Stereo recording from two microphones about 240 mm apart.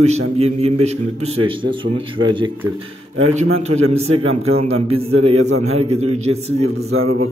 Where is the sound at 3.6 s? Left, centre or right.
Right.